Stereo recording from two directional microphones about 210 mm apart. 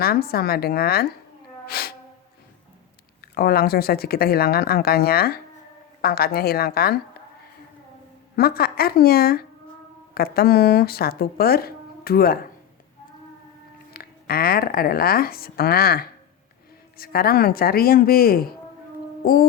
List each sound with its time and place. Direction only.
0.0 s speech: 45° left (ahead or behind)
1.6 s sneeze: 45° left (ahead or behind)
3.3 s speech: 45° left (ahead or behind)
8.4 s speech: 45° left (ahead or behind)
13.9 s speech: 45° left (ahead or behind)